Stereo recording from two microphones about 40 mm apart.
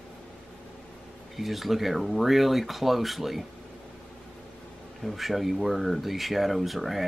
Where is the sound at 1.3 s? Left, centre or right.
Centre.